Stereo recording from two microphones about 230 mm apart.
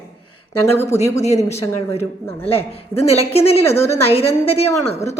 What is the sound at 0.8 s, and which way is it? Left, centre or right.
A man's voice, left.